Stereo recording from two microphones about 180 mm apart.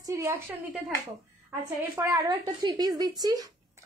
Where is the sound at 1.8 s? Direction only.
15° right (ahead or behind).